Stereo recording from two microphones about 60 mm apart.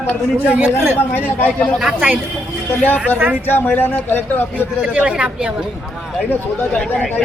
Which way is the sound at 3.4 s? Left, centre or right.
Left.